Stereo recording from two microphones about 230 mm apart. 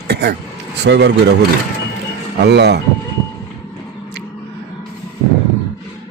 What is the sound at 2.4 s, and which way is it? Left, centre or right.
Speech, right.